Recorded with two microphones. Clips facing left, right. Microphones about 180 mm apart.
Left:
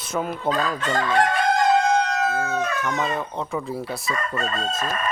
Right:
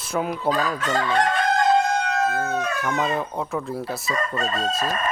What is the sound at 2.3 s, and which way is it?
Speech, 5° left (ahead or behind).